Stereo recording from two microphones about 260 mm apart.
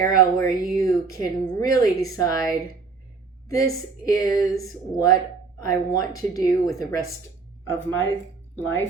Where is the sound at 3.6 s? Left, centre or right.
Centre.